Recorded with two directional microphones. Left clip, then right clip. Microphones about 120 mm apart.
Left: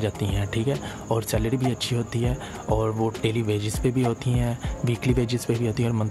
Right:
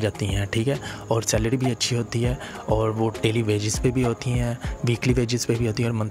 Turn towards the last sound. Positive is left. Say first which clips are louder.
# right 1 dB
turn(degrees=-20)  # may be behind; listen again after turning